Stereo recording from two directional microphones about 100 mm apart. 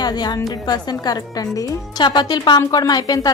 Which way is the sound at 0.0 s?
45° left (ahead or behind).